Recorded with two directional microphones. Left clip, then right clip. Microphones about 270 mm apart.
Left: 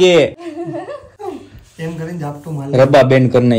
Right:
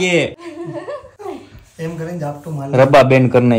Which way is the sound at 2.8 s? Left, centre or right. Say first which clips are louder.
Even; centre.